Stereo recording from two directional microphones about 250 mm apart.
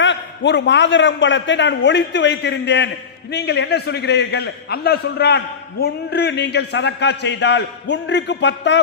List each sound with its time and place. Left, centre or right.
0.0 s a man's voice: left